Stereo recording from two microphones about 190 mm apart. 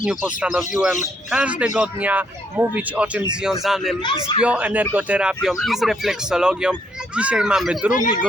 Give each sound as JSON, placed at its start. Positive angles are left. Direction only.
{"t": 0.0, "sound": "speech", "side_deg": -5}
{"t": 4.0, "sound": "a man's voice", "side_deg": 25}
{"t": 4.4, "sound": "speech", "side_deg": -5}